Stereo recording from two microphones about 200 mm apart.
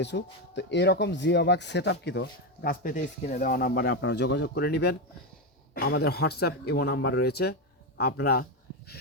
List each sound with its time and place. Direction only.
0.0 s speech: 60° left (ahead or behind)